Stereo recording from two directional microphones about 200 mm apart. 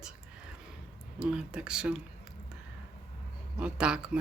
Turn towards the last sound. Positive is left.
turn(degrees=-5)  # may be behind; listen again after turning